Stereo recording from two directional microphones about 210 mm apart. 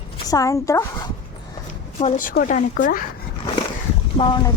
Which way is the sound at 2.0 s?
35° left (ahead or behind).